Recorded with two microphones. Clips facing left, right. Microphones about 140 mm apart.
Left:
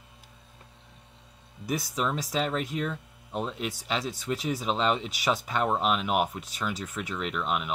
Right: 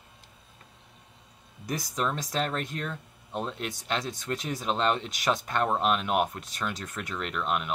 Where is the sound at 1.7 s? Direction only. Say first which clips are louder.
Left 1 dB; 5° left (ahead or behind).